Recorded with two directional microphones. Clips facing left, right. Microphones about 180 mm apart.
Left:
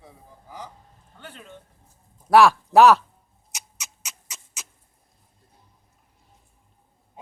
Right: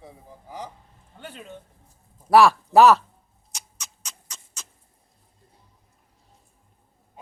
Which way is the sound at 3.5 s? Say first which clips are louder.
Even; 5° left (ahead or behind).